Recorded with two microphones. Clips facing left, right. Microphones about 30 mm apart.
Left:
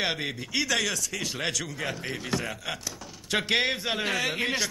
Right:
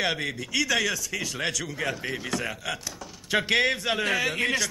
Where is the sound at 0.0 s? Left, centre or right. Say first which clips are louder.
Right 2 dB; left.